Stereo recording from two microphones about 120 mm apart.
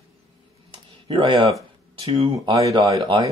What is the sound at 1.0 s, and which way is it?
Speech, 45° right (ahead or behind).